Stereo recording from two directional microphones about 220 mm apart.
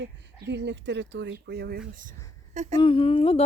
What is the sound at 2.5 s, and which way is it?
Speech, 30° right (ahead or behind).